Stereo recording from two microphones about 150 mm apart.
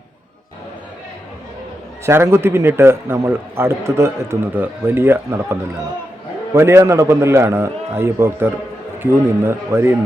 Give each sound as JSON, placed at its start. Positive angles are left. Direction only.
{"t": 2.0, "sound": "a man's voice", "side_deg": -15}
{"t": 9.5, "sound": "a man's voice", "side_deg": -15}